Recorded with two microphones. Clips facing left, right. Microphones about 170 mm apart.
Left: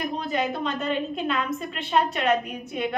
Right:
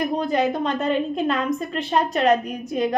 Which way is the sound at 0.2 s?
40° right (ahead or behind).